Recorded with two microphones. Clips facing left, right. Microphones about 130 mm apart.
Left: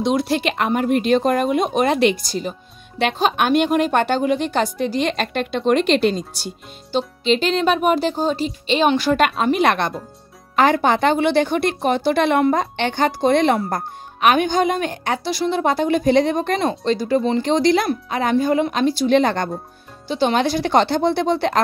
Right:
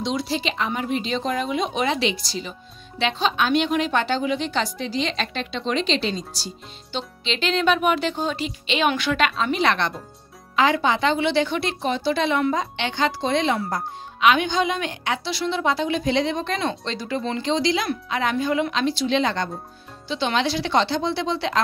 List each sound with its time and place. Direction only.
0.0 s a woman's voice: 55° left (ahead or behind); by 17.2 s 40° left (ahead or behind)
17.4 s a woman's voice: 50° left (ahead or behind)
17.8 s a woman's voice: 40° left (ahead or behind)